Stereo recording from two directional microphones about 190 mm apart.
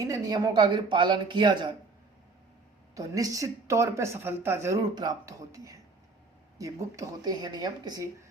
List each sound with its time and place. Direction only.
0.0 s speech: 20° right (ahead or behind)
2.9 s a woman's voice: 20° right (ahead or behind)